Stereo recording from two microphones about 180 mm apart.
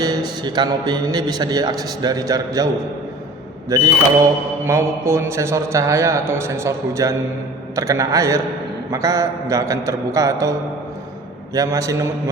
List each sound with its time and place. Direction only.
0.0 s a man's voice: 20° right (ahead or behind)
3.7 s a man's voice: 15° right (ahead or behind)
11.5 s a man's voice: 20° right (ahead or behind)